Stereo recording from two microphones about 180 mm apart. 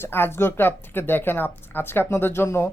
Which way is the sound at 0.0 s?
10° left (ahead or behind).